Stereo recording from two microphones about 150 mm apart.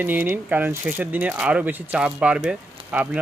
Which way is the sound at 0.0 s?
15° right (ahead or behind).